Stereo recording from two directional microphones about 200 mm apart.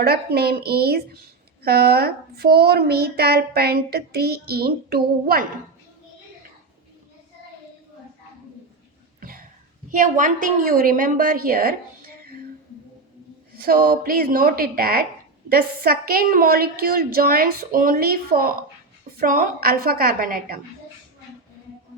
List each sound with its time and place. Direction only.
0.0 s speech: 50° right (ahead or behind)
9.2 s cough: 45° right (ahead or behind)
9.9 s speech: 40° right (ahead or behind)
13.6 s speech: 45° right (ahead or behind)